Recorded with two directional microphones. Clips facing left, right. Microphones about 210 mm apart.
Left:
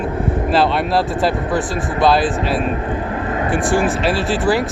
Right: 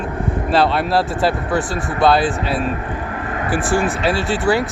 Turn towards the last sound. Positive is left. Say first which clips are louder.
# left 1 dB
turn(degrees=0)  # may be behind; listen again after turning